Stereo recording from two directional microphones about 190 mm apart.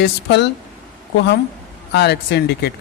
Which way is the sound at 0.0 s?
65° left (ahead or behind).